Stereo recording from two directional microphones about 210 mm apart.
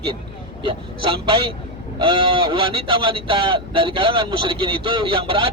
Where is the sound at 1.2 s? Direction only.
25° right (ahead or behind).